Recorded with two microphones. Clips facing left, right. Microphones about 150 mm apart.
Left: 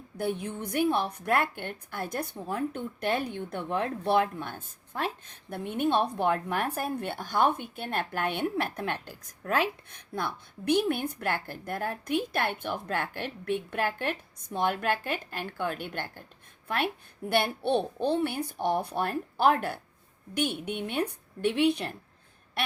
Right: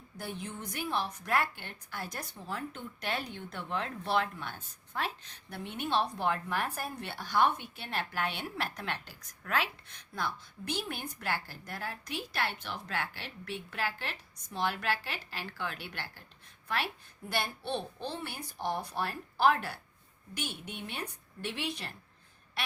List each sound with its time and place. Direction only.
0.2 s a woman's voice: 60° left (ahead or behind)